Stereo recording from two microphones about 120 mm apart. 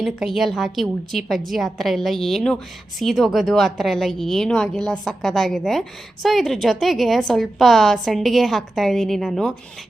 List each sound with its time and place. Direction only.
0.0 s a woman's voice: centre (ahead or behind)